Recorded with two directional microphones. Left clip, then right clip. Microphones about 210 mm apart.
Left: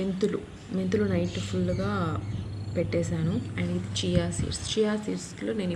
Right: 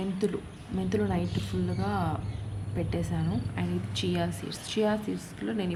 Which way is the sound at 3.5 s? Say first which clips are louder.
Left 2 dB; 35° right (ahead or behind).